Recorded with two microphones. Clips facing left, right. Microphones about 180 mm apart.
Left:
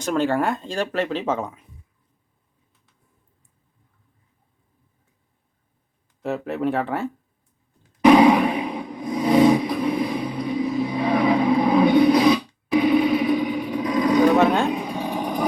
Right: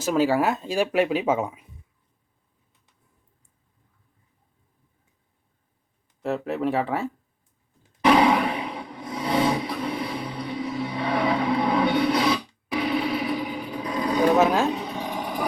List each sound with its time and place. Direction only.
0.0 s speech: 5° right (ahead or behind)
6.2 s speech: centre (ahead or behind)
8.0 s roar: 20° left (ahead or behind)
10.0 s a sound: 20° left (ahead or behind)
12.8 s vehicle: 20° left (ahead or behind)
14.3 s speech: 5° right (ahead or behind)
14.7 s a sound: 10° left (ahead or behind)